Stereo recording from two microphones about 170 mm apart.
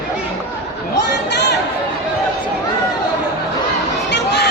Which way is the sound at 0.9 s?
80° left.